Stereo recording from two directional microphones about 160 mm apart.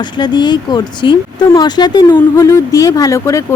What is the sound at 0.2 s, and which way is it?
Speech, 30° left (ahead or behind).